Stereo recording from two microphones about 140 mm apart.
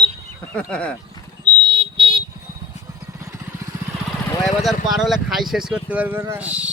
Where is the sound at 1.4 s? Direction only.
35° right (ahead or behind).